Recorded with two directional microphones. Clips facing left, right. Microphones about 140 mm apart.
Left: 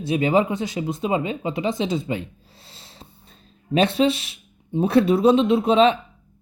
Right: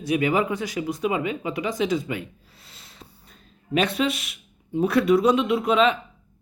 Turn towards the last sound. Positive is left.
turn(degrees=30)  # may be behind; listen again after turning